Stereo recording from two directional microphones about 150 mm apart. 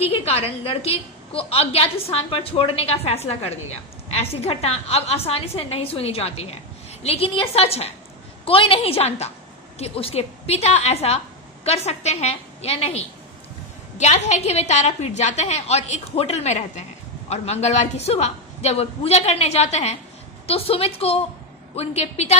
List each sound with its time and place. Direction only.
0.0 s a woman's voice: 40° left (ahead or behind)
14.0 s a woman's voice: 50° left (ahead or behind)